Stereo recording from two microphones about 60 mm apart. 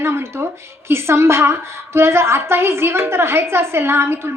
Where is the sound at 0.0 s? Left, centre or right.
Right.